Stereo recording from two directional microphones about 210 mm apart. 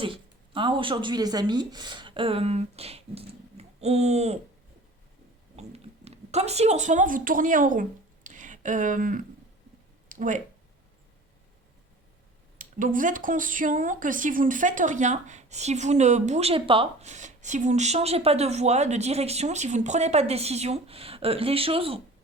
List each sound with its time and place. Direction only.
0.0 s speech: 25° right (ahead or behind)
5.5 s speech: 30° right (ahead or behind)
12.5 s speech: 40° right (ahead or behind)